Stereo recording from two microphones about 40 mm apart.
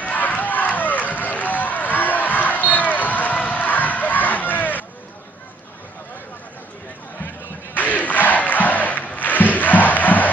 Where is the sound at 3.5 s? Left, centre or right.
Left.